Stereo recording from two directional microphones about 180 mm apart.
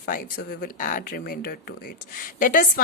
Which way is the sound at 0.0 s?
50° left (ahead or behind).